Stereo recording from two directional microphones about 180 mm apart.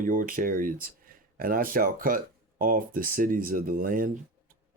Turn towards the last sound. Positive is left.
turn(degrees=-50)  # may be behind; listen again after turning